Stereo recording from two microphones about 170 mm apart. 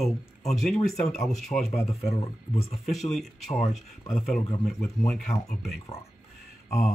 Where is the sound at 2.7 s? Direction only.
Centre (ahead or behind).